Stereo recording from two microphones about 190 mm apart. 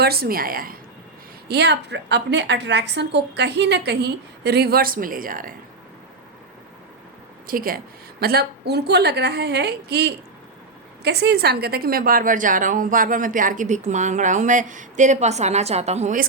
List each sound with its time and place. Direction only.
0.0 s a woman's voice: 55° right (ahead or behind)
1.5 s a woman's voice: 60° right (ahead or behind)
7.4 s a woman's voice: 50° right (ahead or behind)